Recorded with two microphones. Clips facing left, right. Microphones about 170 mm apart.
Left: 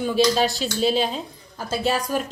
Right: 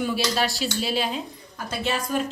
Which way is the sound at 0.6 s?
5° right (ahead or behind).